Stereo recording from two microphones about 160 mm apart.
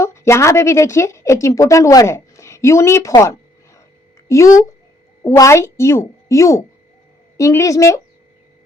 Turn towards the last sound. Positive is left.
turn(degrees=20)  # may be behind; listen again after turning